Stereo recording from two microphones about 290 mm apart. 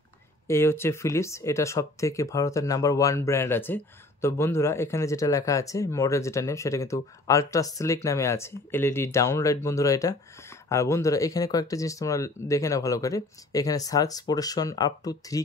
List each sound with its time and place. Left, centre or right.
0.5 s speech: centre